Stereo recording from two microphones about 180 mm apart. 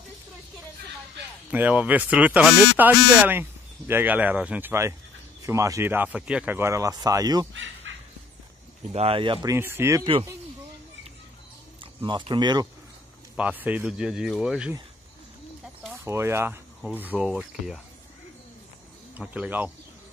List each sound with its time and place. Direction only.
1.5 s speech: 10° right (ahead or behind)
7.5 s dog: 90° right
8.9 s speech: 30° right (ahead or behind)
9.5 s speech: 15° right (ahead or behind)
11.8 s speech: 25° right (ahead or behind)
13.4 s speech: 10° right (ahead or behind)
15.8 s speech: 10° right (ahead or behind)
19.1 s speech: 10° right (ahead or behind)